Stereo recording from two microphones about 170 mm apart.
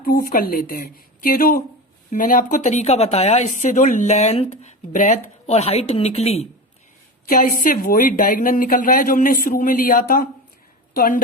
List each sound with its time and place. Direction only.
0.0 s speech: 60° left (ahead or behind); by 6.5 s 40° left (ahead or behind)
7.3 s a woman's voice: 55° left (ahead or behind)